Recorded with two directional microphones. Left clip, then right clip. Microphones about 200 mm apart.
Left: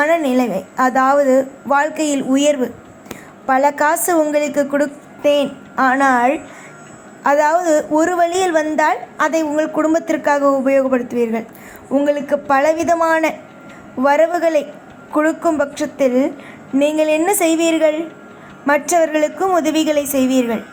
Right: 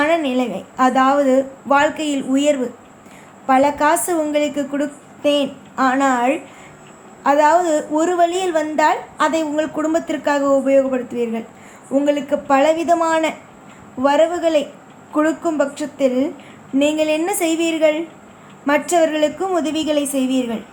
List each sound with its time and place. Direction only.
0.0 s a woman's voice: 20° left (ahead or behind)